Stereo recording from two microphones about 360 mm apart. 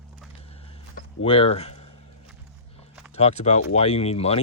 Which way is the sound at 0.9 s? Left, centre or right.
Centre.